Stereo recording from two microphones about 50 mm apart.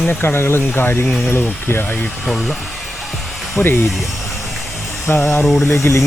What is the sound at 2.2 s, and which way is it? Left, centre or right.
Speech, centre.